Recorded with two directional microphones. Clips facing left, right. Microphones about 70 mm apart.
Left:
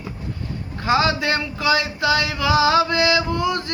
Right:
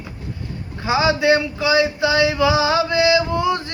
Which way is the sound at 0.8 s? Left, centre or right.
Centre.